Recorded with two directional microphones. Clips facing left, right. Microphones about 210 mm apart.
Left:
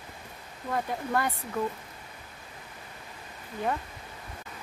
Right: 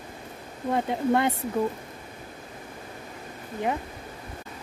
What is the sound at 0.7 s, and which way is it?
Speech, 25° right (ahead or behind).